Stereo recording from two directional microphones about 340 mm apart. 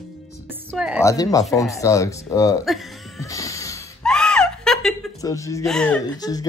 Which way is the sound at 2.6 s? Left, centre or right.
Centre.